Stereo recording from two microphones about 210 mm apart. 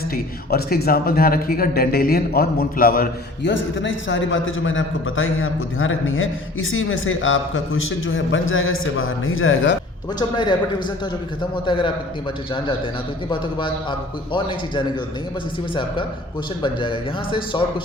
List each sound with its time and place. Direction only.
0.5 s a man's voice: 45° left (ahead or behind)
3.5 s a man's voice: 60° left (ahead or behind)
10.2 s a man's voice: 20° left (ahead or behind)
15.7 s a man's voice: 25° left (ahead or behind)